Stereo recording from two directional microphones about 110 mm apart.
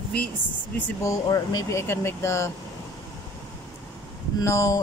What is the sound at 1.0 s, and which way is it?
Speech, 30° left (ahead or behind).